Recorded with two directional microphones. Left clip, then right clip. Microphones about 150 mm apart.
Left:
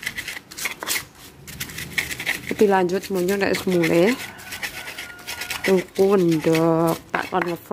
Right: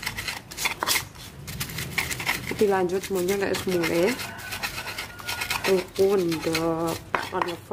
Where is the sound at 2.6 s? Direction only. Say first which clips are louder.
Left 5 dB; 65° left (ahead or behind).